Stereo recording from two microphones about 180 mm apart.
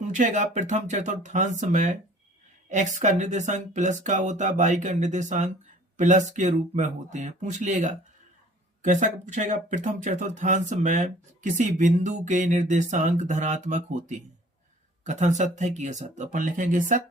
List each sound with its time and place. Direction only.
0.1 s speech: 45° right (ahead or behind)